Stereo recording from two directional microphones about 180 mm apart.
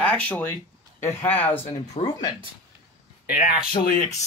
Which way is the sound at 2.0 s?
35° left (ahead or behind).